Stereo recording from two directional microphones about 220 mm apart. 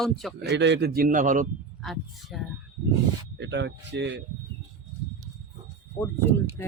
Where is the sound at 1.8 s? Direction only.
Centre (ahead or behind).